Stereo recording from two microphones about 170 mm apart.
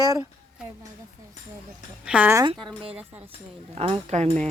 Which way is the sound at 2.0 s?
10° right (ahead or behind).